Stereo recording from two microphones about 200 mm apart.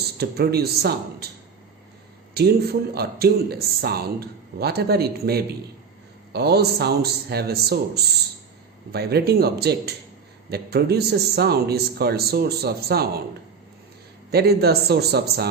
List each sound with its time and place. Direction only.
0.2 s speech: 50° right (ahead or behind)
2.4 s speech: 55° right (ahead or behind)
14.3 s speech: 50° right (ahead or behind)